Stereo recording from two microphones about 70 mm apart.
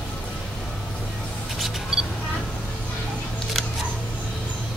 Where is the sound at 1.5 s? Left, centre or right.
Centre.